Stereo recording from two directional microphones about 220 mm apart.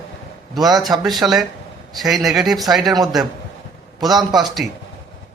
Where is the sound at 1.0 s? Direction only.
Centre (ahead or behind).